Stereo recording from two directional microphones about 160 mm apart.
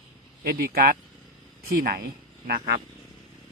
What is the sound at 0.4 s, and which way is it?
Speech, 70° right (ahead or behind).